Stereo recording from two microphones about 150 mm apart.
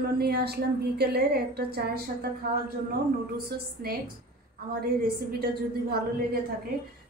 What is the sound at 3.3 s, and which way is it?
Speech, 90° right.